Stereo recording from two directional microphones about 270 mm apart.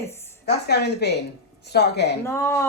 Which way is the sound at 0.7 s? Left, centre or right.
Left.